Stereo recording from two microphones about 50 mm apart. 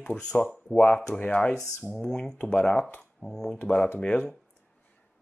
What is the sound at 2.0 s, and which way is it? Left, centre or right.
Speech, centre.